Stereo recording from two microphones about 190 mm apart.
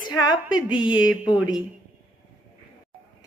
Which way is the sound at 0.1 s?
20° left (ahead or behind).